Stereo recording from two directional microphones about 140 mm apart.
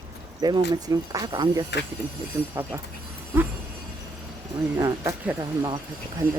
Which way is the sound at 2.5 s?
20° right (ahead or behind).